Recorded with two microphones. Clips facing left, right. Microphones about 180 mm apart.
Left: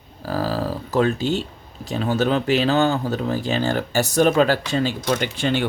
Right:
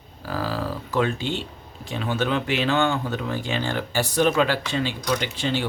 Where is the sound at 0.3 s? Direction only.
40° left (ahead or behind).